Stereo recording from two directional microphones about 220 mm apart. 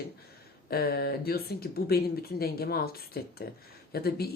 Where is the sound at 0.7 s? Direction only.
45° left (ahead or behind).